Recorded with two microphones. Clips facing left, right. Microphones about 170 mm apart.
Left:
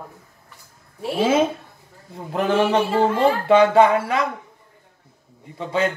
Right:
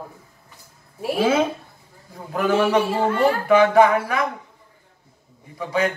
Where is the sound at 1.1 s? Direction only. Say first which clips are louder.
Left 1 dB; 20° left (ahead or behind).